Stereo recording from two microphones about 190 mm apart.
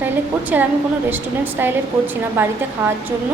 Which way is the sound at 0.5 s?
10° right (ahead or behind).